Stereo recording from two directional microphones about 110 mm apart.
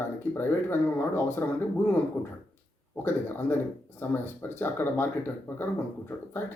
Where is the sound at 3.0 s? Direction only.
20° left (ahead or behind).